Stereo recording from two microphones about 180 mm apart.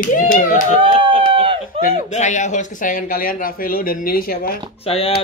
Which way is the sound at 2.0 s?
40° left (ahead or behind).